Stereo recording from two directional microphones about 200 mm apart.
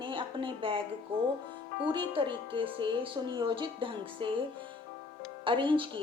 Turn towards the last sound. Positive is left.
turn(degrees=-25)  # may be behind; listen again after turning